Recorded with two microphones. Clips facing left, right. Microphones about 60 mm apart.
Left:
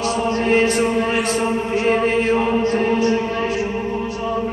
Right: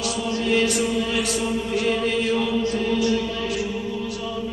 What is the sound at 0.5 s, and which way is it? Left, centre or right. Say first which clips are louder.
Chant: left 4 dB; left.